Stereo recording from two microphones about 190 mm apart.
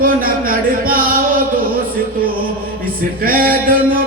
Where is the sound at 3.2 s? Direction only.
50° right (ahead or behind).